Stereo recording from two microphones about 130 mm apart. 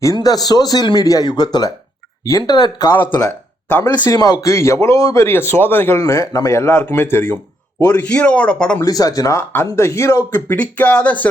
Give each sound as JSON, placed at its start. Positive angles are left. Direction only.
{"t": 0.0, "sound": "speech", "side_deg": 25}
{"t": 4.0, "sound": "a man's voice", "side_deg": 30}
{"t": 8.0, "sound": "speech", "side_deg": 10}
{"t": 8.8, "sound": "speech", "side_deg": 30}